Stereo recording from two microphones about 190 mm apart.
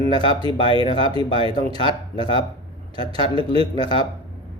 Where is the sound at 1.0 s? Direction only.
25° left (ahead or behind).